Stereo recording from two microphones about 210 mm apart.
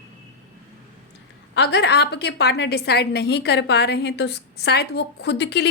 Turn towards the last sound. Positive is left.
turn(degrees=55)  # may be behind; listen again after turning